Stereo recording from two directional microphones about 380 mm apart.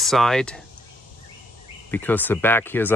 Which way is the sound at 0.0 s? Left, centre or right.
Centre.